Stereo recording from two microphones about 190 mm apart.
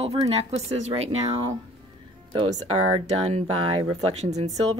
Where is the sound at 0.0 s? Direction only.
30° right (ahead or behind).